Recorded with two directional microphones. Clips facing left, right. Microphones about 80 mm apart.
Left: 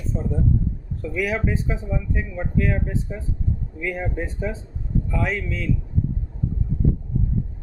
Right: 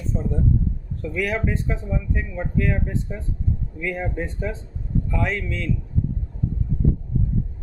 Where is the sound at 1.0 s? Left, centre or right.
Centre.